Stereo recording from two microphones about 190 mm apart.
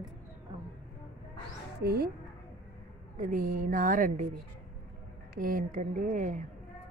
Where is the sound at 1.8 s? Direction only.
55° right (ahead or behind).